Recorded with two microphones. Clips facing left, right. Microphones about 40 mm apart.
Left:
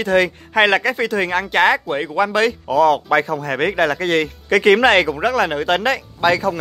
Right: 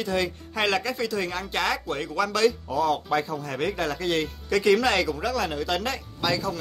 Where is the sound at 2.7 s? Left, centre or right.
Left.